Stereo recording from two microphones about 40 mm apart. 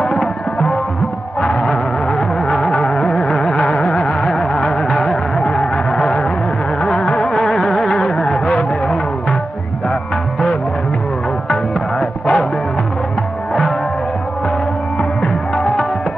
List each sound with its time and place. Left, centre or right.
0.0 s music: centre
12.0 s music: centre
15.5 s music: centre